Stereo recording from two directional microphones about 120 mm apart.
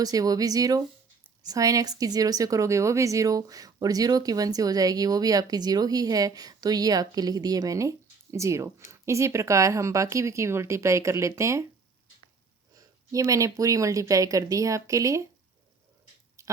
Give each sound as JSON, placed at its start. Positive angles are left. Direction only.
{"t": 0.0, "sound": "a woman's voice", "side_deg": -30}
{"t": 12.7, "sound": "a woman's voice", "side_deg": -30}
{"t": 16.4, "sound": "a sound", "side_deg": -25}